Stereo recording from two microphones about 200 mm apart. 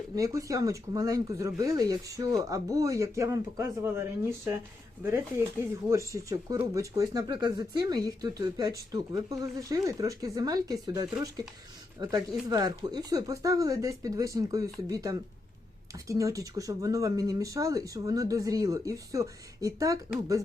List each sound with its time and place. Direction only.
0.2 s speech: 15° right (ahead or behind)